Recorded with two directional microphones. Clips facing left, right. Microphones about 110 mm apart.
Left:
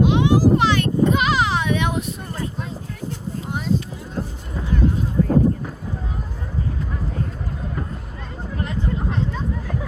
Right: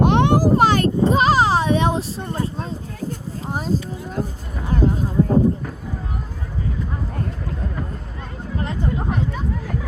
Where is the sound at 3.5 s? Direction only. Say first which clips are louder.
Right 1 dB; 40° right (ahead or behind).